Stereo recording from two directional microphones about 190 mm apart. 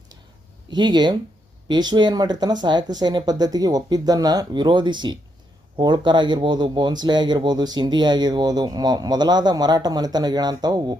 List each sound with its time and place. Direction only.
0.7 s speech: 25° right (ahead or behind)